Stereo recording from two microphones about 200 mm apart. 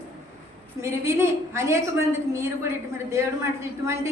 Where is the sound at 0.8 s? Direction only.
15° right (ahead or behind).